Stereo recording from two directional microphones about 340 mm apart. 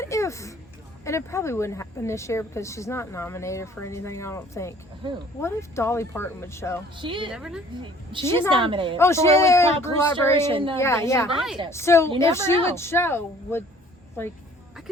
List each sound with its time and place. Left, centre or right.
0.0 s a sound: centre
1.0 s a woman's voice: centre
7.0 s a woman's voice: centre
7.3 s a woman's voice: centre
8.4 s a woman's voice: centre
9.0 s a woman's voice: centre